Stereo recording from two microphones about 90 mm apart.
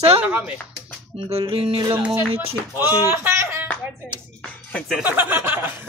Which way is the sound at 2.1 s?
25° right (ahead or behind).